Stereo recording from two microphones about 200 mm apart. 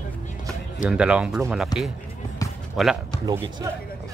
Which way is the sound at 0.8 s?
5° right (ahead or behind).